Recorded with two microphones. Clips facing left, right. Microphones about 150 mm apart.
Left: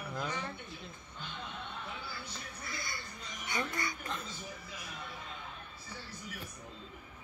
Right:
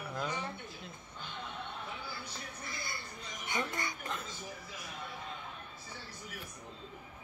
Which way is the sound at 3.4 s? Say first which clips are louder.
Even; 20° right (ahead or behind).